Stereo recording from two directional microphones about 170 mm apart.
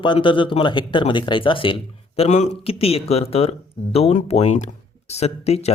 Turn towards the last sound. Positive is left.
turn(degrees=40)  # may be behind; listen again after turning